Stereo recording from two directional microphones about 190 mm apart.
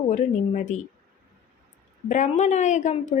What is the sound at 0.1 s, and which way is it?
Speech, 40° left (ahead or behind).